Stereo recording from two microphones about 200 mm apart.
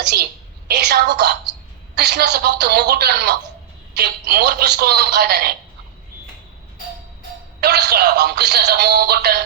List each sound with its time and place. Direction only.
0.0 s speech: 55° right (ahead or behind)
7.6 s speech: 55° right (ahead or behind)